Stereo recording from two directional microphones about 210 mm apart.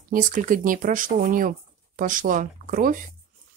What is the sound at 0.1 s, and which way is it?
Speech, 40° right (ahead or behind).